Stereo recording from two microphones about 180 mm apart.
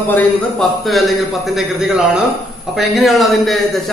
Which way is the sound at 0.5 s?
Centre (ahead or behind).